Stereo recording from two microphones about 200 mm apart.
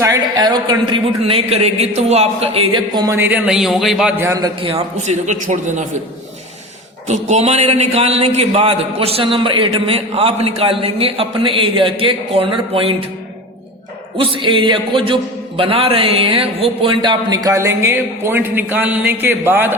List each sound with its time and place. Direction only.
0.0 s a man's voice: 15° right (ahead or behind)
4.3 s a man's voice: 20° right (ahead or behind); by 5.8 s 35° right (ahead or behind)
7.1 s a man's voice: 35° right (ahead or behind)
14.2 s a man's voice: 25° right (ahead or behind)